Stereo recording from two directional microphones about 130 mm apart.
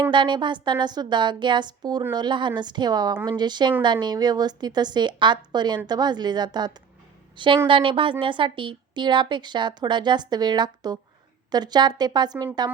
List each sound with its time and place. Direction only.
0.0 s a woman's voice: 35° right (ahead or behind)